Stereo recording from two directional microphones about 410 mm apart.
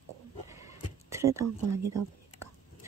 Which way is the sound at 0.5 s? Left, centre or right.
Centre.